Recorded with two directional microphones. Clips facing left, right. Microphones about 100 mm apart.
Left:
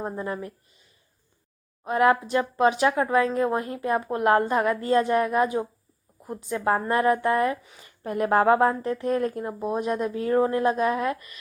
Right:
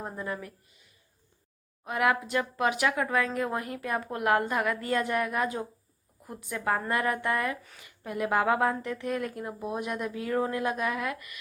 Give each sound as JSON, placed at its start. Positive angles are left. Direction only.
{"t": 0.0, "sound": "speech", "side_deg": 25}
{"t": 1.8, "sound": "speech", "side_deg": 30}
{"t": 7.8, "sound": "a woman's voice", "side_deg": 40}